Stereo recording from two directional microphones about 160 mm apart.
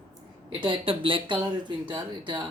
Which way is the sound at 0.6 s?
30° right (ahead or behind).